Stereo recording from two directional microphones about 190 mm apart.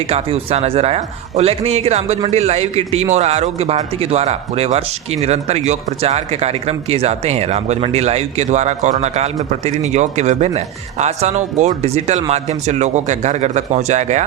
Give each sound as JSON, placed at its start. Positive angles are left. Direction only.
{"t": 0.1, "sound": "speech", "side_deg": -35}